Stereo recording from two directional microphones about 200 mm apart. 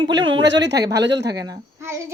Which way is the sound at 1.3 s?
20° right (ahead or behind).